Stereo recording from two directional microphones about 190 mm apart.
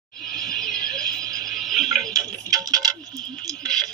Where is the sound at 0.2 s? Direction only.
Centre (ahead or behind).